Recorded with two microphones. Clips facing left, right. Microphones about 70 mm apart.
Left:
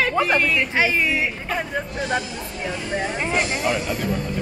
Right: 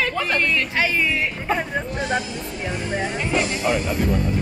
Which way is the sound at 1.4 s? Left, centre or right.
Centre.